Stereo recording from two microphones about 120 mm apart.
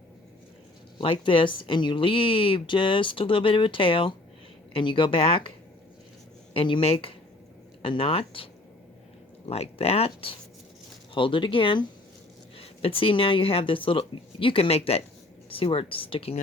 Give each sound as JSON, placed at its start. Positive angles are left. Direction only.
{"t": 0.9, "sound": "speech", "side_deg": 45}
{"t": 6.5, "sound": "speech", "side_deg": 45}
{"t": 9.5, "sound": "speech", "side_deg": 55}